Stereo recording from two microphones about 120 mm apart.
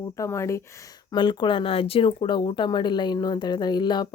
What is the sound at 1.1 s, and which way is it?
Speech, 40° left (ahead or behind).